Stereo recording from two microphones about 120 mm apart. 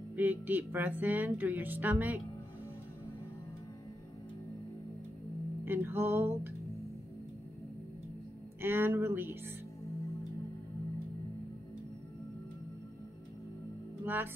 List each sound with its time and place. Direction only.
0.1 s music: 15° right (ahead or behind)
5.7 s music: 20° right (ahead or behind)
8.5 s music: 20° right (ahead or behind)
14.0 s music: 15° right (ahead or behind)